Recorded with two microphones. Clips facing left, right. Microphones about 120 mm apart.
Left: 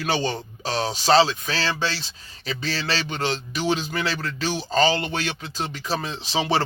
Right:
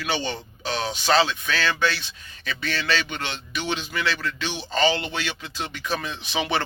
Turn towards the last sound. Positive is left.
turn(degrees=30)  # may be behind; listen again after turning